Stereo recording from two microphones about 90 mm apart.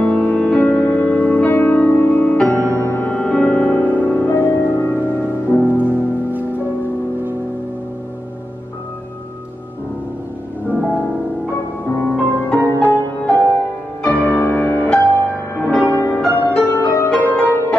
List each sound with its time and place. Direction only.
0.0 s music: 15° left (ahead or behind)
5.7 s music: 20° right (ahead or behind)
10.7 s music: 20° left (ahead or behind)
16.8 s music: 35° left (ahead or behind)
17.2 s music: 25° left (ahead or behind)